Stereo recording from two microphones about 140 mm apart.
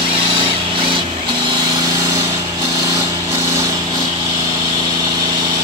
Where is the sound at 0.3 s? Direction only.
35° right (ahead or behind).